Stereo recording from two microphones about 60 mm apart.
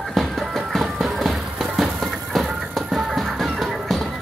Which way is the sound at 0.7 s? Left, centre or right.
Centre.